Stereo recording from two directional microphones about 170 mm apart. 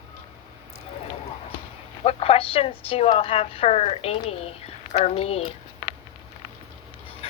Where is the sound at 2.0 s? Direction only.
35° left (ahead or behind).